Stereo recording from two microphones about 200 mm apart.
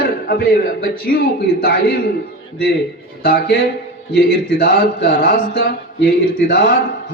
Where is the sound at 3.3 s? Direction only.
55° left (ahead or behind).